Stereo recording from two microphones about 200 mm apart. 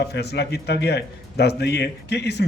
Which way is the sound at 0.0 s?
55° left (ahead or behind).